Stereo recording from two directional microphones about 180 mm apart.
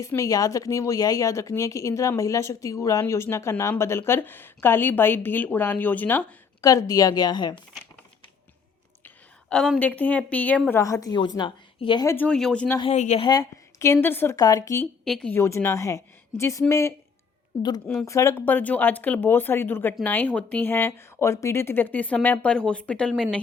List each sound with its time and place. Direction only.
0.0 s speech: 15° left (ahead or behind)
9.0 s a woman's voice: 5° left (ahead or behind); by 12.0 s 25° left (ahead or behind)
12.0 s speech: 10° left (ahead or behind)
12.8 s a woman's voice: 40° left (ahead or behind)
13.2 s speech: 20° left (ahead or behind)
15.0 s speech: 5° left (ahead or behind)
18.0 s speech: 15° left (ahead or behind)